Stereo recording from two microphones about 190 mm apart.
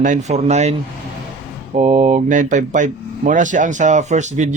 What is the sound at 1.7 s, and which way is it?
Speech, 35° right (ahead or behind).